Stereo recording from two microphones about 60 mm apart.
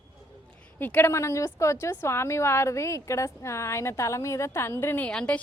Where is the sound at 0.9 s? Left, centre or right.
Left.